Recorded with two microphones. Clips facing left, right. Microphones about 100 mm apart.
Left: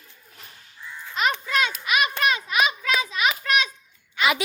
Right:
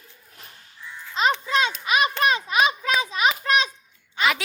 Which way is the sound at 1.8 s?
30° right (ahead or behind).